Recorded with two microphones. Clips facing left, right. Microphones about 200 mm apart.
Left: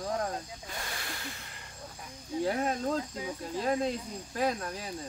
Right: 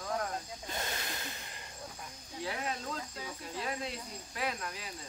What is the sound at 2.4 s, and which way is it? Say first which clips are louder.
Speech: left 7 dB; 45° left (ahead or behind).